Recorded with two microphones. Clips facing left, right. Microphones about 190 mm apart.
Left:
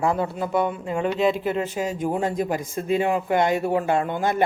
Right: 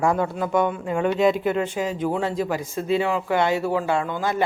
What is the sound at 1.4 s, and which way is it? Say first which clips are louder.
A woman's voice: right 1 dB; 35° left (ahead or behind).